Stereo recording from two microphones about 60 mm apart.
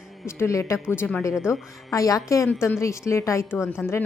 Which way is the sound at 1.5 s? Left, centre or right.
Left.